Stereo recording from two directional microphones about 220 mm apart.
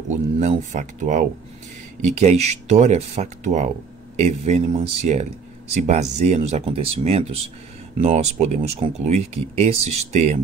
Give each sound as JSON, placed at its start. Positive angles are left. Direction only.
{"t": 0.1, "sound": "speech", "side_deg": -35}